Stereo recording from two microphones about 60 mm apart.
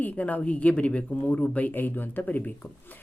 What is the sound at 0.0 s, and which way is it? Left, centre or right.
Speech, left.